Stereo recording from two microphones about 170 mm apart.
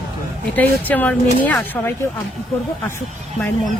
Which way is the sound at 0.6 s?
10° left (ahead or behind).